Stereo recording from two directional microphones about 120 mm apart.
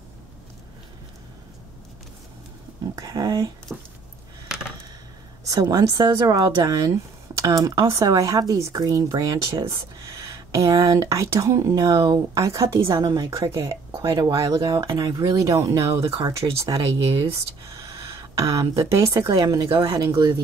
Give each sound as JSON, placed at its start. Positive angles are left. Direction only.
{"t": 3.0, "sound": "speech", "side_deg": -30}
{"t": 5.4, "sound": "speech", "side_deg": -30}
{"t": 14.6, "sound": "speech", "side_deg": -40}
{"t": 18.0, "sound": "speech", "side_deg": -30}